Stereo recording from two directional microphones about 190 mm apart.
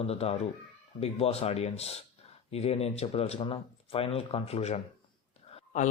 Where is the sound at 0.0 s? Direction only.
30° left (ahead or behind).